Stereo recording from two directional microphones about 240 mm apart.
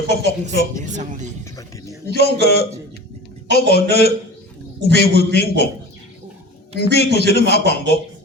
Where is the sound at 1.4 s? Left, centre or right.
Centre.